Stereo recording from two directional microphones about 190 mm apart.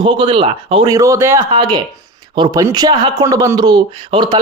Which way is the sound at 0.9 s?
15° right (ahead or behind).